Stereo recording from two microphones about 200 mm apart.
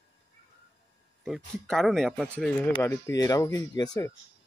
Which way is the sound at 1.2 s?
Centre (ahead or behind).